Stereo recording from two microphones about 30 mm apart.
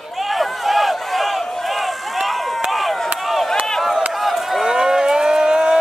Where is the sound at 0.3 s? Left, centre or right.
Centre.